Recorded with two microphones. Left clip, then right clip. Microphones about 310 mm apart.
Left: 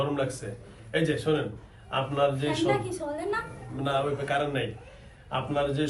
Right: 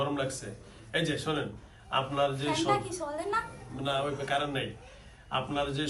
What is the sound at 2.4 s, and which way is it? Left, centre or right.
Speech, centre.